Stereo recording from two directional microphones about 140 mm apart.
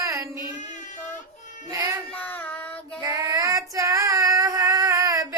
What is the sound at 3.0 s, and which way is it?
Female singing, 25° right (ahead or behind).